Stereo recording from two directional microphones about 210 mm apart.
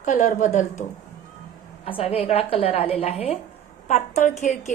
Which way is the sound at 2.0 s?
30° left (ahead or behind).